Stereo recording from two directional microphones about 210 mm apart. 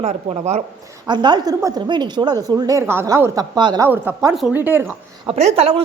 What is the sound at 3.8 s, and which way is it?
Speech, 10° right (ahead or behind).